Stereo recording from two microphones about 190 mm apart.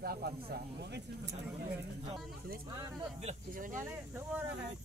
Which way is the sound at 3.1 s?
40° right (ahead or behind).